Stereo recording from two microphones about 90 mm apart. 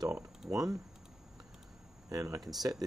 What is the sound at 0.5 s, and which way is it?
Speech, 40° right (ahead or behind).